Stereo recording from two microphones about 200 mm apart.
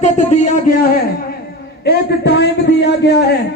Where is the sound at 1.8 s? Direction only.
55° left (ahead or behind).